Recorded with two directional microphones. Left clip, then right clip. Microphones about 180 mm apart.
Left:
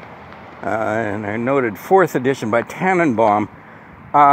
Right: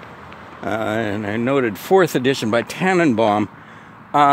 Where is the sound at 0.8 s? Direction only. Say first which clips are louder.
Left 1 dB; 35° right (ahead or behind).